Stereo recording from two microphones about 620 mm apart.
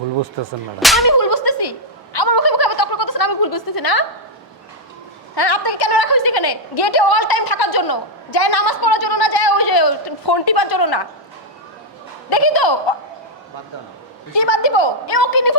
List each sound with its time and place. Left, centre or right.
0.8 s speech: centre
1.0 s whip: left
2.1 s a sound: left
5.3 s a woman's voice: left
12.3 s a woman's voice: left
14.3 s a woman's voice: left